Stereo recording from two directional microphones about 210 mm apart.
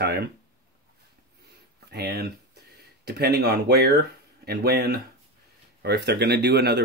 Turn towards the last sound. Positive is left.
turn(degrees=-50)  # may be behind; listen again after turning